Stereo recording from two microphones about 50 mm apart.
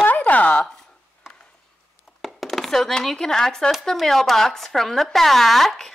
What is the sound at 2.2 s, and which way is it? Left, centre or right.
Chopping, centre.